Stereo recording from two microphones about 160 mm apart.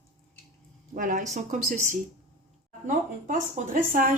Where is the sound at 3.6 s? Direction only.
50° right (ahead or behind).